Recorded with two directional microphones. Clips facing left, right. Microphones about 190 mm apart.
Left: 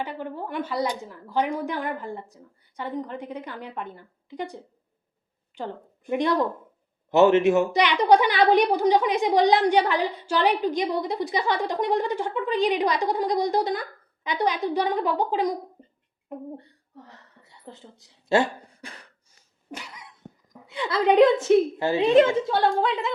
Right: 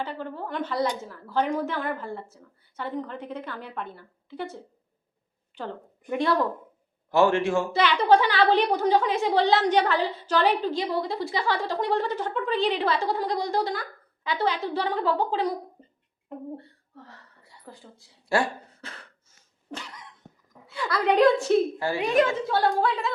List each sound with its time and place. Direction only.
0.0 s a woman's voice: 15° left (ahead or behind)
16.6 s a sound: 15° left (ahead or behind)
19.7 s dog: 10° left (ahead or behind)
20.7 s a woman's voice: 20° left (ahead or behind)